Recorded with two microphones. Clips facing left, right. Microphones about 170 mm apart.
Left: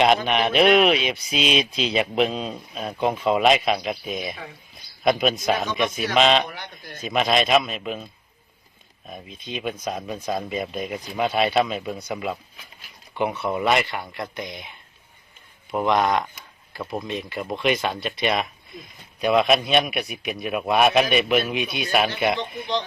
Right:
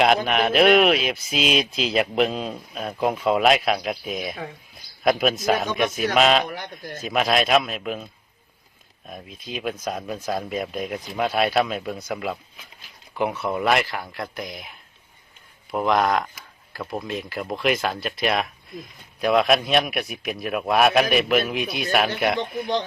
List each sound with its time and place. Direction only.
0.3 s speech: centre (ahead or behind)
6.5 s speech: 40° right (ahead or behind)
7.0 s speech: centre (ahead or behind)